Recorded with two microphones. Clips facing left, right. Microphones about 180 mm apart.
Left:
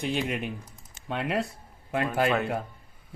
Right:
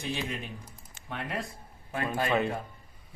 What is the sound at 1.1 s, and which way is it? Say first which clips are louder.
Speech: left 7 dB; 75° left (ahead or behind).